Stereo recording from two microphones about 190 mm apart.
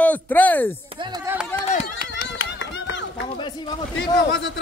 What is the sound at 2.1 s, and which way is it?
Run, 65° left (ahead or behind).